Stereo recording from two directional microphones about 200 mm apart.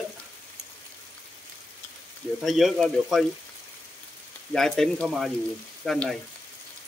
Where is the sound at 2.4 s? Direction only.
Centre (ahead or behind).